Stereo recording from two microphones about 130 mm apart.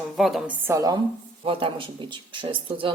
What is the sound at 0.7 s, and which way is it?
Speech, 25° right (ahead or behind).